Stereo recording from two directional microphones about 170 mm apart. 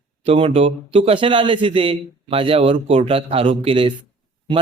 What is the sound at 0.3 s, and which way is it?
Speech, 35° right (ahead or behind).